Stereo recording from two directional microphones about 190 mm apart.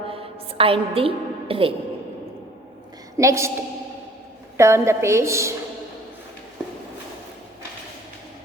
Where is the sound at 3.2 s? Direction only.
15° right (ahead or behind).